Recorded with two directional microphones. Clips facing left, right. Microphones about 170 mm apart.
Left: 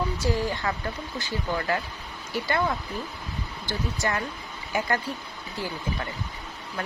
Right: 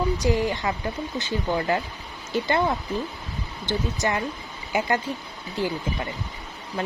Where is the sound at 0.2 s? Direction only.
20° right (ahead or behind).